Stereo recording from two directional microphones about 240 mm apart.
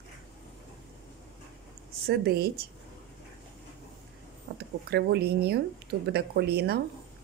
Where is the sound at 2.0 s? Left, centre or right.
Right.